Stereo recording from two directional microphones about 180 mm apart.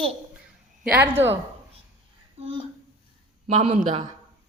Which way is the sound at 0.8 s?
10° right (ahead or behind).